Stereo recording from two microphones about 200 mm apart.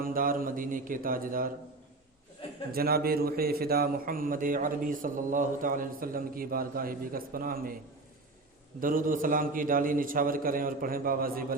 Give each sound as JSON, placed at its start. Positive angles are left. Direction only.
{"t": 0.0, "sound": "a man's voice", "side_deg": -45}
{"t": 2.7, "sound": "a man's voice", "side_deg": -50}
{"t": 8.8, "sound": "a man's voice", "side_deg": -45}